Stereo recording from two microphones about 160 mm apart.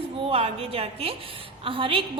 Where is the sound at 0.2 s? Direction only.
40° right (ahead or behind).